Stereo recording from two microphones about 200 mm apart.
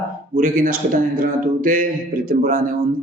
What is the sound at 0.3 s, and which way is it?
Speech, 45° right (ahead or behind).